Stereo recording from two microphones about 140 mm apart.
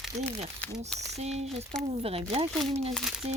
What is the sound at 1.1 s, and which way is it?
Speech, 50° right (ahead or behind).